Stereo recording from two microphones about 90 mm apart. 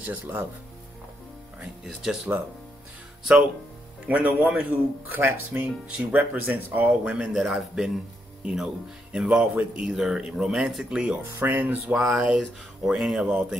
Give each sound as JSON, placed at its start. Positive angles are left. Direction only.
{"t": 0.0, "sound": "speech", "side_deg": -20}
{"t": 1.6, "sound": "speech", "side_deg": -5}
{"t": 4.1, "sound": "speech", "side_deg": -15}
{"t": 11.3, "sound": "speech", "side_deg": -25}
{"t": 11.9, "sound": "speech", "side_deg": -5}